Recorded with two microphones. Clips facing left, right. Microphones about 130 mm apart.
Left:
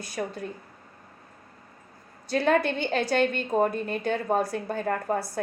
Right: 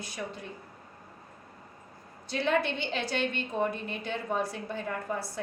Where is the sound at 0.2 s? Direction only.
45° left (ahead or behind).